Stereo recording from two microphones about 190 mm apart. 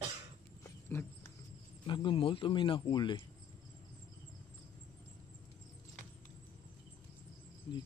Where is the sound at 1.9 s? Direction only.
25° left (ahead or behind).